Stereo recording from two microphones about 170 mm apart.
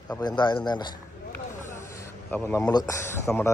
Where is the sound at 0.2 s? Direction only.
25° left (ahead or behind).